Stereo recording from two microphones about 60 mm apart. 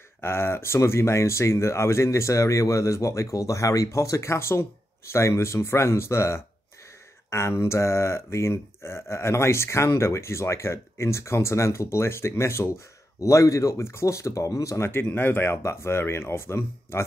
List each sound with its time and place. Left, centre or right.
0.2 s speech: left
13.2 s speech: left
15.0 s speech: left